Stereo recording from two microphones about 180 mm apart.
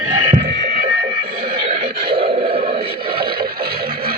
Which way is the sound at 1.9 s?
60° right (ahead or behind).